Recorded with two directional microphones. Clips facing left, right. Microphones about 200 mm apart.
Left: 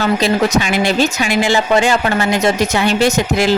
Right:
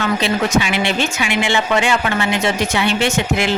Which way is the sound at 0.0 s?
40° left (ahead or behind).